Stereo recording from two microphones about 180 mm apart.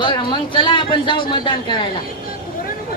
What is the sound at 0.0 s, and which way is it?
A man's voice, 25° left (ahead or behind).